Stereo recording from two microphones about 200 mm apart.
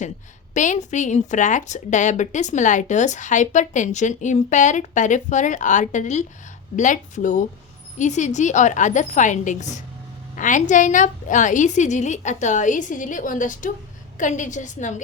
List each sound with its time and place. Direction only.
0.5 s speech: 40° left (ahead or behind)